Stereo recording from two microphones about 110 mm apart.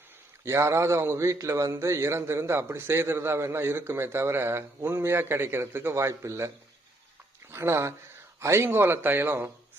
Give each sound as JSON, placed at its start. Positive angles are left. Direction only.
{"t": 0.4, "sound": "a man's voice", "side_deg": -25}
{"t": 7.5, "sound": "a man's voice", "side_deg": -25}